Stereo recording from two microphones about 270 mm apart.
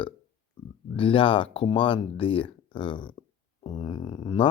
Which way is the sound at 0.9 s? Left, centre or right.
Centre.